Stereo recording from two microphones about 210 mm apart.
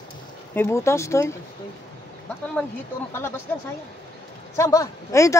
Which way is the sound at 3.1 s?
10° left (ahead or behind).